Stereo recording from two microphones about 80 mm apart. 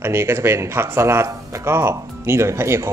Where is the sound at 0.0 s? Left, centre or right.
Right.